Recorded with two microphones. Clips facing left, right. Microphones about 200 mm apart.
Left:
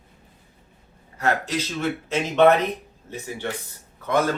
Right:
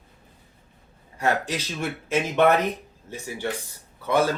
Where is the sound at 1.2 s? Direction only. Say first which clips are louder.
Left 1 dB; 15° right (ahead or behind).